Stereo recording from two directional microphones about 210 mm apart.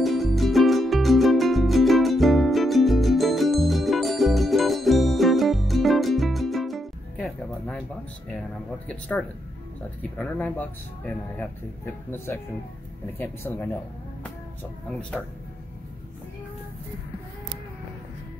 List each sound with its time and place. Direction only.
0.0 s music: centre (ahead or behind)
8.3 s speech: 5° left (ahead or behind)
14.9 s speech: 5° left (ahead or behind)